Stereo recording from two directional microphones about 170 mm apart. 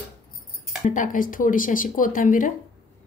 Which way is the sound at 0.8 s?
50° left (ahead or behind).